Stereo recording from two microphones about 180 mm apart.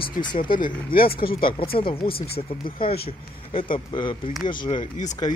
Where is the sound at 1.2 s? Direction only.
30° left (ahead or behind).